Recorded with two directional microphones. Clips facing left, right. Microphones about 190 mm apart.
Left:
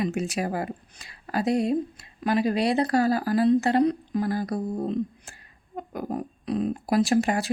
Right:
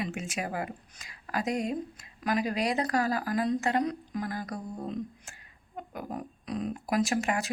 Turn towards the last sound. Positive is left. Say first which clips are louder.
# left 6 dB
turn(degrees=35)  # may be behind; listen again after turning